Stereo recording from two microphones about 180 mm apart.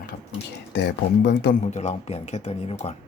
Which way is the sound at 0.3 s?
80° left.